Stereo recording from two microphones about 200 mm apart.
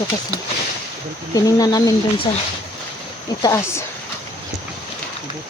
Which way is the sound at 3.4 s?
15° left (ahead or behind).